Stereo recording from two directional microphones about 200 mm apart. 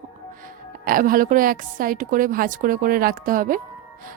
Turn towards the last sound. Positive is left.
turn(degrees=-45)  # may be behind; listen again after turning